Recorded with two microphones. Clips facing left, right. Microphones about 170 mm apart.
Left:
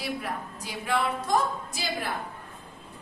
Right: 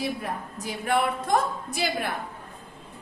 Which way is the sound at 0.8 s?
60° right (ahead or behind).